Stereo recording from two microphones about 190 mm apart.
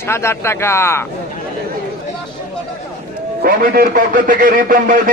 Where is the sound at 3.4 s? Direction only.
45° right (ahead or behind).